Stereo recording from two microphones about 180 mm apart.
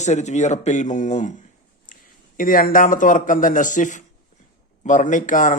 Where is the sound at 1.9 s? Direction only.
45° left (ahead or behind).